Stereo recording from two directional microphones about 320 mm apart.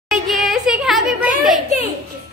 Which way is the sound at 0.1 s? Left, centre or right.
Centre.